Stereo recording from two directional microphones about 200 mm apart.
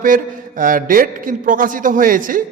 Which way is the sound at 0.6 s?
45° right (ahead or behind).